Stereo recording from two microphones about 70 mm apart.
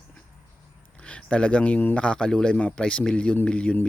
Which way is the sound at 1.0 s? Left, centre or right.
Centre.